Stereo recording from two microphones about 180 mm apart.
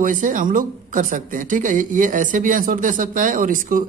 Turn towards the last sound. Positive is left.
turn(degrees=-50)  # may be behind; listen again after turning